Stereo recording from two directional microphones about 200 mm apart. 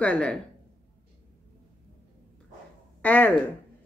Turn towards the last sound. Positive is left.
turn(degrees=10)  # may be behind; listen again after turning